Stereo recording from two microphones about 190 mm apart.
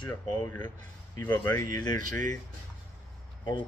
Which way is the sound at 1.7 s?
20° left (ahead or behind).